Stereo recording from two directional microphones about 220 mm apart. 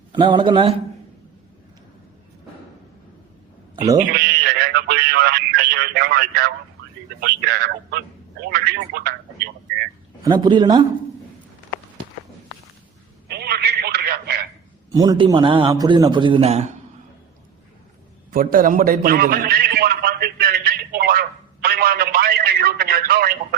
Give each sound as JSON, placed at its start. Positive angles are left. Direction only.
{"t": 0.1, "sound": "a man's voice", "side_deg": -20}
{"t": 3.9, "sound": "speech", "side_deg": -45}
{"t": 10.2, "sound": "a man's voice", "side_deg": -20}
{"t": 13.2, "sound": "telephone", "side_deg": -45}
{"t": 14.9, "sound": "a man's voice", "side_deg": -20}
{"t": 18.3, "sound": "a man's voice", "side_deg": -40}